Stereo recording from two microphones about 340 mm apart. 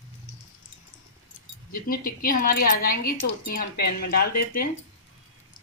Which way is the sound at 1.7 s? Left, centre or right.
Left.